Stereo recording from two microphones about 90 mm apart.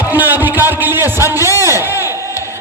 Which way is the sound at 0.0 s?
20° right (ahead or behind).